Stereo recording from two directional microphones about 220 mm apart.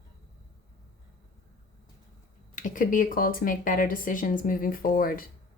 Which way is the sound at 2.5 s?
35° left (ahead or behind).